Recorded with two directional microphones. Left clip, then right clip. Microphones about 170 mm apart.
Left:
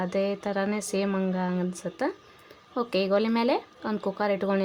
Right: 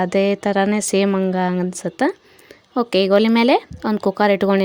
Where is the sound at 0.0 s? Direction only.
50° right (ahead or behind).